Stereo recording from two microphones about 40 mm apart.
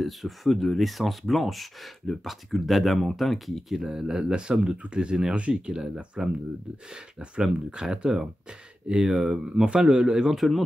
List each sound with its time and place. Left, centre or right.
0.0 s speech: centre
3.8 s speech: centre
10.3 s speech: centre